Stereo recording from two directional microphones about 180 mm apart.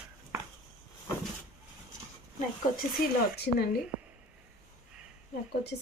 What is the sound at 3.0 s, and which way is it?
Speech, 60° left (ahead or behind).